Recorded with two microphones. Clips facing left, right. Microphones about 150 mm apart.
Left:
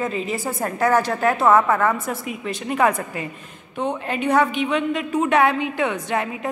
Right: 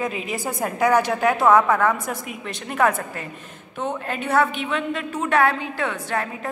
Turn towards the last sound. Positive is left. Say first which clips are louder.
# left 2 dB
turn(degrees=20)  # may be behind; listen again after turning